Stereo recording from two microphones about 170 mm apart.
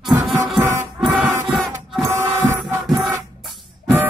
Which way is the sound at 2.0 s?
15° right (ahead or behind).